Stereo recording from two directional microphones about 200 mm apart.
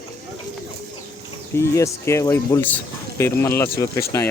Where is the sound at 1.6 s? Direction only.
15° left (ahead or behind).